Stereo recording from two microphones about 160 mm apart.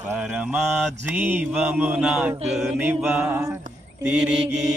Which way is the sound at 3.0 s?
5° right (ahead or behind).